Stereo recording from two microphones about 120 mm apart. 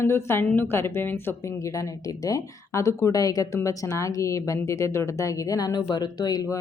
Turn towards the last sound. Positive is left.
turn(degrees=30)  # may be behind; listen again after turning